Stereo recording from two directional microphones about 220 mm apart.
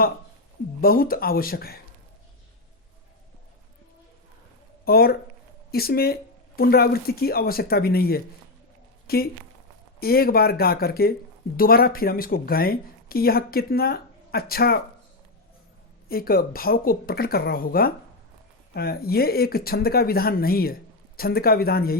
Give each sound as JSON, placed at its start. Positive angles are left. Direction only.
{"t": 0.8, "sound": "speech", "side_deg": 40}
{"t": 4.9, "sound": "speech", "side_deg": 45}
{"t": 16.0, "sound": "speech", "side_deg": 45}